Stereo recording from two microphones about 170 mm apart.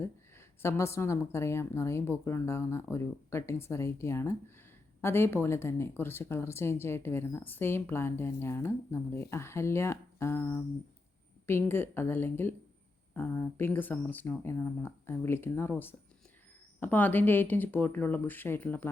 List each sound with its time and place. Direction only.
0.0 s speech: 15° left (ahead or behind)